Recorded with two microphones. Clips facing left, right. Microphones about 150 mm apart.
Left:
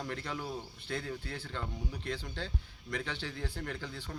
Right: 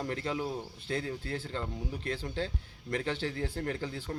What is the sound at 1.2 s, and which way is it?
Speech, 40° right (ahead or behind).